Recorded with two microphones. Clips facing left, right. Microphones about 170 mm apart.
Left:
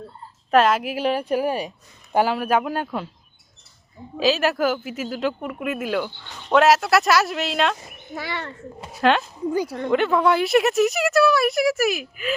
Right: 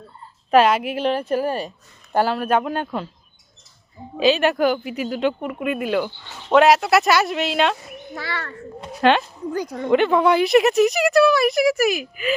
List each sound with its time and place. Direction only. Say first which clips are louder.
0.5 s a woman's voice: right 2 dB; centre (ahead or behind)
4.2 s speech: right 3 dB; centre (ahead or behind)
8.1 s a child's voice: left 1 dB; 15° left (ahead or behind)
8.8 s speech: right 2 dB; centre (ahead or behind)